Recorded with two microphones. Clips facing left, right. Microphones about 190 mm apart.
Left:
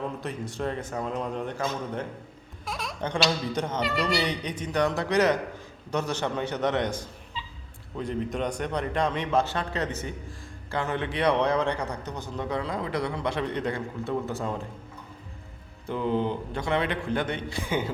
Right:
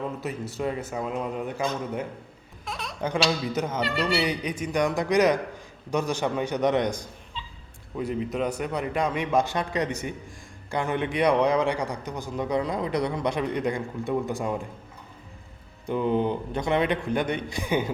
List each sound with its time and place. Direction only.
0.2 s a man's voice: 5° right (ahead or behind)
2.6 s a sound: centre (ahead or behind)
3.0 s a man's voice: 5° right (ahead or behind)
15.9 s a man's voice: 15° right (ahead or behind)